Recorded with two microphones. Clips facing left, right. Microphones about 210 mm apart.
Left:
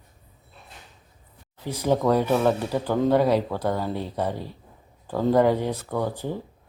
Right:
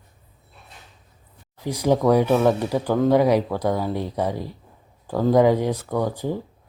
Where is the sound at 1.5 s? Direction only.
15° right (ahead or behind).